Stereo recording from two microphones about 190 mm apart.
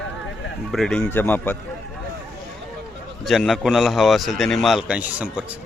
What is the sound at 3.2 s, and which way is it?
A man's voice, centre (ahead or behind).